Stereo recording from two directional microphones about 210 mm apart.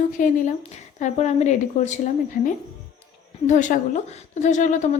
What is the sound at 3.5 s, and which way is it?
A woman's voice, 35° left (ahead or behind).